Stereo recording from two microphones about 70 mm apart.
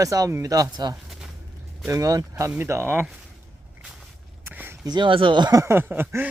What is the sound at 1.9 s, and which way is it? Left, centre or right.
Speech, right.